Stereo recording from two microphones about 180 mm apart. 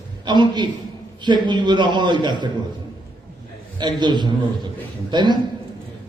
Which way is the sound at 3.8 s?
25° right (ahead or behind).